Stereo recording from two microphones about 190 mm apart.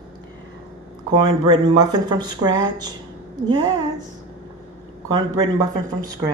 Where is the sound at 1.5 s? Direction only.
25° right (ahead or behind).